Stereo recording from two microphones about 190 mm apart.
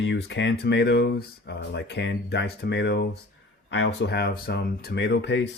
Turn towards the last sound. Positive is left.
turn(degrees=65)  # may be behind; listen again after turning